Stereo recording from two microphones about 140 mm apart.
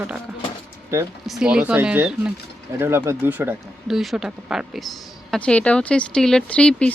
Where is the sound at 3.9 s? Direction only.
Centre (ahead or behind).